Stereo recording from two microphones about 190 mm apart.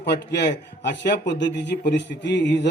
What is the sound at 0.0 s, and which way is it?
A man's voice, 60° left (ahead or behind).